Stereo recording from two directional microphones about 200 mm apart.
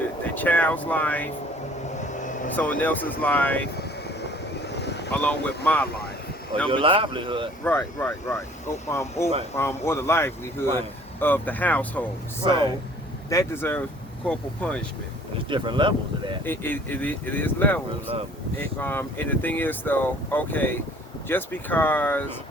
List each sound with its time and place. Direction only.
0.3 s speech: 10° left (ahead or behind)
2.0 s vehicle: 40° left (ahead or behind)
2.6 s speech: 5° left (ahead or behind)
3.8 s vehicle: 55° left (ahead or behind)
5.1 s speech: 5° left (ahead or behind)
6.7 s speech: 25° right (ahead or behind)
7.6 s speech: 10° left (ahead or behind)
12.4 s speech: 25° right (ahead or behind)
13.3 s speech: 10° left (ahead or behind)
15.4 s speech: 25° right (ahead or behind)
16.4 s speech: 10° left (ahead or behind)
18.1 s speech: 30° right (ahead or behind)
18.6 s speech: 10° left (ahead or behind)